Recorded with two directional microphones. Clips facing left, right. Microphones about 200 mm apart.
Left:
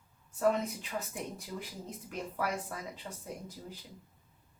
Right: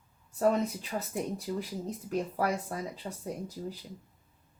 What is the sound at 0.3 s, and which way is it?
A woman's voice, 35° right (ahead or behind).